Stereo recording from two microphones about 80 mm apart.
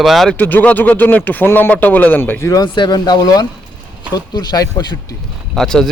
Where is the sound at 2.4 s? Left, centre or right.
Left.